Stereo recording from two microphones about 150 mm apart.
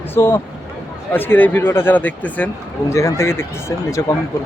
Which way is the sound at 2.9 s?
20° left (ahead or behind).